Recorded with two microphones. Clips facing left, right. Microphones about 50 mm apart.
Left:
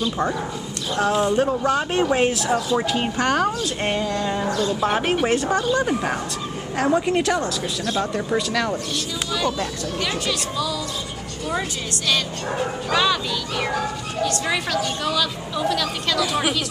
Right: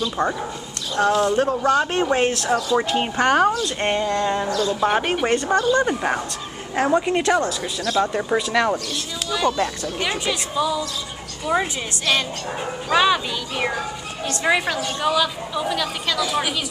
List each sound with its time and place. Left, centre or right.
0.2 s speech: centre
1.4 s speech: centre
2.8 s a woman's voice: centre
3.6 s speech: centre
4.5 s speech: left
4.7 s speech: centre
6.7 s a woman's voice: centre
9.3 s a woman's voice: centre; by 10.8 s right
12.1 s a woman's voice: right
16.2 s speech: centre